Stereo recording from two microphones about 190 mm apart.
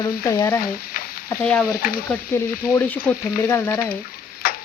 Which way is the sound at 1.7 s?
50° left (ahead or behind).